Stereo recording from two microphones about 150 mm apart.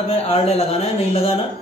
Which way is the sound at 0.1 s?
40° left (ahead or behind).